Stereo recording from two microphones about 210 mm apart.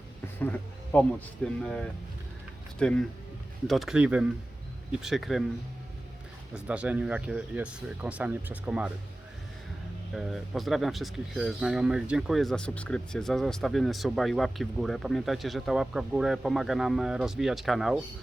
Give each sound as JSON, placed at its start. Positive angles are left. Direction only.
{"t": 0.9, "sound": "speech", "side_deg": 10}
{"t": 6.5, "sound": "speech", "side_deg": -5}
{"t": 10.2, "sound": "speech", "side_deg": 0}